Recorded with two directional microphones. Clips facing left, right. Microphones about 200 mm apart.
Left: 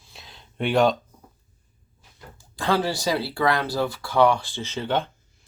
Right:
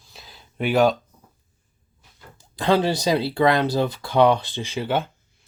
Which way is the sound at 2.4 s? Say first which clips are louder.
Right 4 dB; 20° right (ahead or behind).